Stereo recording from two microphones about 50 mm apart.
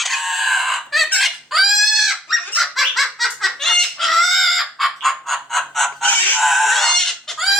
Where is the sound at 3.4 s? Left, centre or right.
Centre.